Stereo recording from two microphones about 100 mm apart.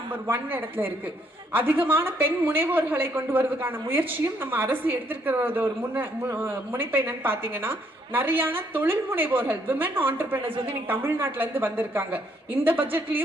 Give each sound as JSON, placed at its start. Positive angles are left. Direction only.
{"t": 0.1, "sound": "a woman's voice", "side_deg": -20}